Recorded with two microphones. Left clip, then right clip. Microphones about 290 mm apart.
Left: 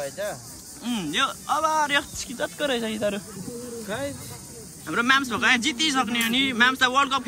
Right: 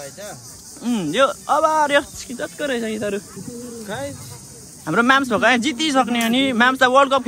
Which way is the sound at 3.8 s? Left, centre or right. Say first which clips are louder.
Right 2 dB; centre.